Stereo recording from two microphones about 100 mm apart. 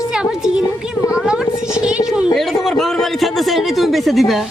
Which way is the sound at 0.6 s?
30° left (ahead or behind).